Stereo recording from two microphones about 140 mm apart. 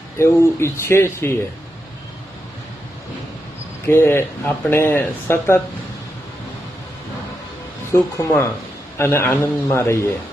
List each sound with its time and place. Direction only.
0.2 s speech: 20° left (ahead or behind)
3.8 s speech: 15° left (ahead or behind)
7.9 s speech: 15° left (ahead or behind)